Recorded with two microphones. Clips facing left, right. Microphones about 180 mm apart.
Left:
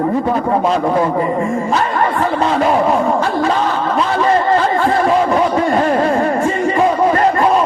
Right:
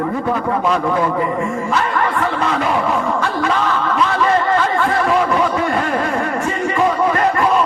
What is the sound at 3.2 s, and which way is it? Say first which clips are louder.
Snicker: left 3 dB; 35° left (ahead or behind).